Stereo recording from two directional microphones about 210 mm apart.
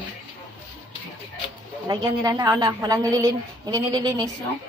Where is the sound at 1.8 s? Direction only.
20° right (ahead or behind).